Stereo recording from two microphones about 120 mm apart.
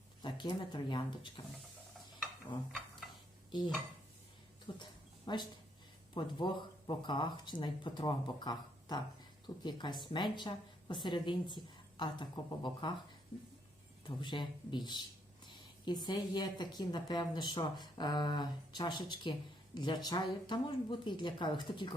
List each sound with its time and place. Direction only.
0.2 s speech: 40° left (ahead or behind)
4.8 s a sound: 40° left (ahead or behind)
6.1 s speech: 40° left (ahead or behind)
14.2 s speech: 40° left (ahead or behind)